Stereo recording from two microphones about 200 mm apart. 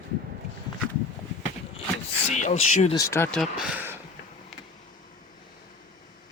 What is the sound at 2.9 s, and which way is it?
Speech, 15° left (ahead or behind).